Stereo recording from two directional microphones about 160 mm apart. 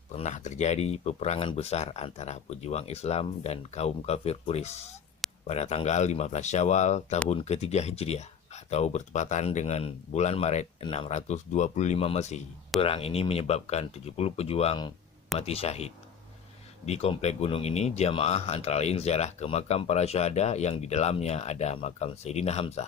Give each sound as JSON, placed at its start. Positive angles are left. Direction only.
{"t": 0.1, "sound": "speech", "side_deg": 45}